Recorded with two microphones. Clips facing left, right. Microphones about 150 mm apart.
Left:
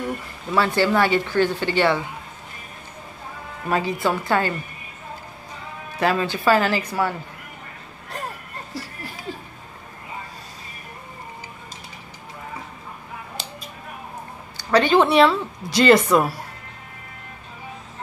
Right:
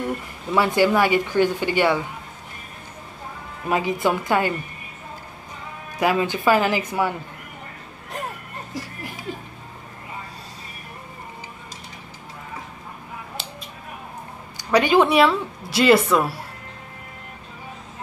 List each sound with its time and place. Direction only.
0.6 s a woman's voice: 15° right (ahead or behind)
3.6 s a woman's voice: 15° right (ahead or behind)
5.9 s a woman's voice: 15° right (ahead or behind)
8.7 s a sound: 15° right (ahead or behind)
13.4 s a sound: centre (ahead or behind)
14.6 s a woman's voice: 10° right (ahead or behind)